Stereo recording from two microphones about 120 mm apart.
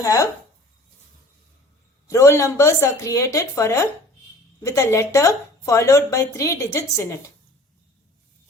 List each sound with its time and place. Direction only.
0.0 s a woman's voice: 30° left (ahead or behind)
2.0 s a woman's voice: 25° left (ahead or behind)